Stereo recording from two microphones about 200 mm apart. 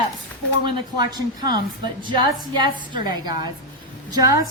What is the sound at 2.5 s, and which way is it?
A woman's voice, 25° right (ahead or behind).